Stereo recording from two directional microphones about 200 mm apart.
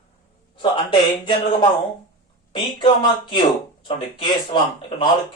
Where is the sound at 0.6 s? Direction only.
25° left (ahead or behind).